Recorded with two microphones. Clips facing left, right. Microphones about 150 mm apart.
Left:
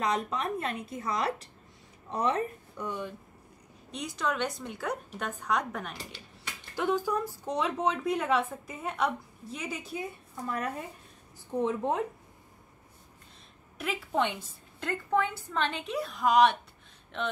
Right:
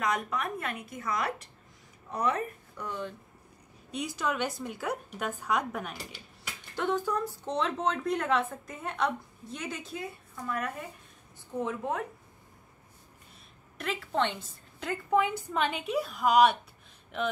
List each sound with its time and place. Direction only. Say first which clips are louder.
0.0 s a woman's voice: left 1 dB; 30° left (ahead or behind)
2.9 s a woman's voice: even; 10° left (ahead or behind)
3.9 s a woman's voice: even; 5° right (ahead or behind)
6.9 s a woman's voice: left 1 dB; 10° left (ahead or behind)
10.3 s a woman's voice: left 1 dB; 35° left (ahead or behind)
13.7 s a woman's voice: even; 5° left (ahead or behind)
15.1 s a woman's voice: right 2 dB; 10° right (ahead or behind)